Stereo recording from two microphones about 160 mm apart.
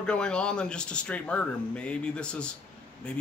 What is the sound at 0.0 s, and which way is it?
Speech, 5° left (ahead or behind).